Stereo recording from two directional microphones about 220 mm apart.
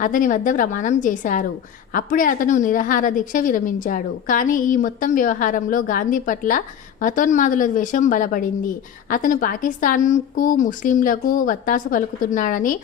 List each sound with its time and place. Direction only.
0.0 s speech: 35° left (ahead or behind)